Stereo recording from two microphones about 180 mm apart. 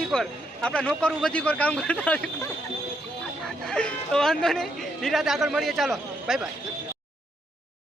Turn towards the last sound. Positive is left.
turn(degrees=0)  # may be behind; listen again after turning